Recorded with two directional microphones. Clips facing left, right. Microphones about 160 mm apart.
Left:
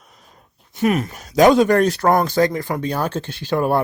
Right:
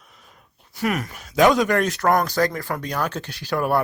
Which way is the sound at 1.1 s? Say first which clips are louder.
Left 3 dB; 35° left (ahead or behind).